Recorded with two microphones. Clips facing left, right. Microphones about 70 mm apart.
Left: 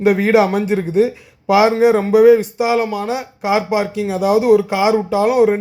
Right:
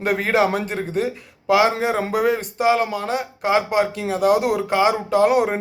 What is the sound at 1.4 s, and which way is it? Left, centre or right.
Speech, centre.